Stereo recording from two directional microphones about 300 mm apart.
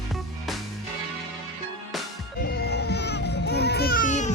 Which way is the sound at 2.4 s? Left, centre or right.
Left.